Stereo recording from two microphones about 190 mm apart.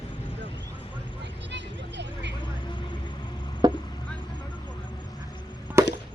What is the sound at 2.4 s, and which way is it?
Vehicle, 25° left (ahead or behind).